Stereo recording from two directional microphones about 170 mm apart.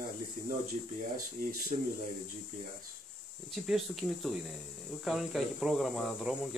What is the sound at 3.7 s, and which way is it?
Speech, centre (ahead or behind).